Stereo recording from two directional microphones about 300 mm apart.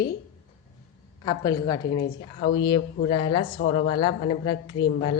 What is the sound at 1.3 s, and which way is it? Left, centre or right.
Speech, centre.